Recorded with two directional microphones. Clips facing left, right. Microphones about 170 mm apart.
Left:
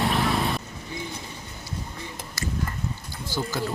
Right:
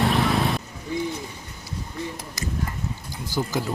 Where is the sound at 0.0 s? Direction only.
Centre (ahead or behind).